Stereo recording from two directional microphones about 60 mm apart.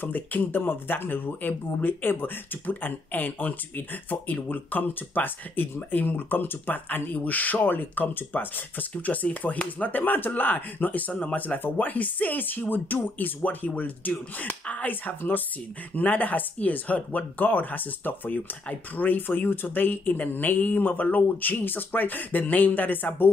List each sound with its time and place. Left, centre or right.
0.0 s speech: left